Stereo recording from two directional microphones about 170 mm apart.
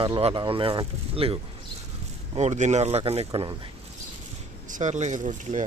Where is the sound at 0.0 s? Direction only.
35° right (ahead or behind).